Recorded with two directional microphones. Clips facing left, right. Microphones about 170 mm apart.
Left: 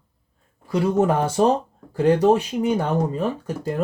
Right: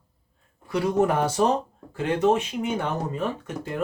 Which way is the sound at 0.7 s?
25° left (ahead or behind).